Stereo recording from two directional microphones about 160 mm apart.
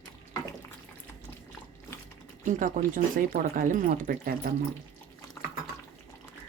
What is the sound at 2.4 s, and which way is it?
Speech, 55° right (ahead or behind).